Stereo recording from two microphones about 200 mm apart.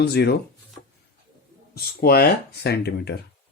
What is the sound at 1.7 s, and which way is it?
Speech, 50° left (ahead or behind).